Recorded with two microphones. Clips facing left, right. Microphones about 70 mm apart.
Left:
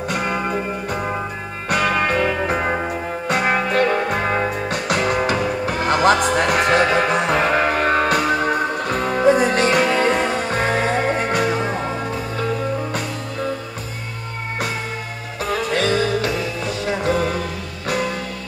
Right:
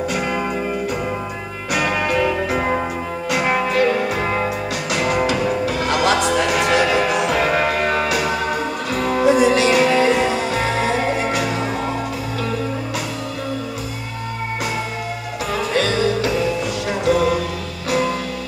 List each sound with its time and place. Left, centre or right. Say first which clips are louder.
0.1 s music: even; left
15.7 s music: right 1 dB; left